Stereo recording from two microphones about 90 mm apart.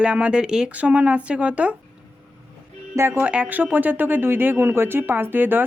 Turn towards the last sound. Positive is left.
turn(degrees=-20)  # may be behind; listen again after turning